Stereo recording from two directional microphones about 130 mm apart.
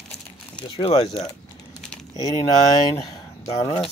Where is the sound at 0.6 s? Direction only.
45° left (ahead or behind).